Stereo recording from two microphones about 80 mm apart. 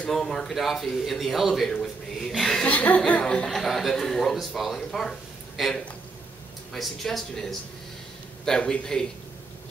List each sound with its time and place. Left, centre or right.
0.1 s a man's voice: centre
2.7 s a man's voice: centre
3.4 s a man's voice: centre